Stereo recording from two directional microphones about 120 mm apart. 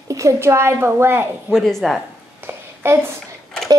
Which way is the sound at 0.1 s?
25° right (ahead or behind).